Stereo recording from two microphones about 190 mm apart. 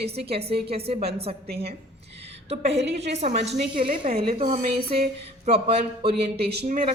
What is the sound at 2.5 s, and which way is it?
A woman's voice, 35° right (ahead or behind).